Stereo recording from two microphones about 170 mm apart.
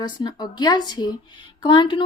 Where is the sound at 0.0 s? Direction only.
25° left (ahead or behind).